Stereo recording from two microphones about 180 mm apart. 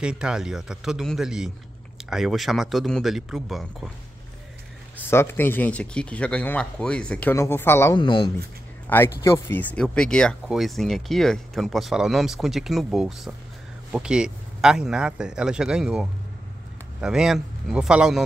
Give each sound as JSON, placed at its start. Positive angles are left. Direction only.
{"t": 0.0, "sound": "speech", "side_deg": -5}
{"t": 4.9, "sound": "speech", "side_deg": 15}
{"t": 8.0, "sound": "speech", "side_deg": 25}
{"t": 8.8, "sound": "a man's voice", "side_deg": 10}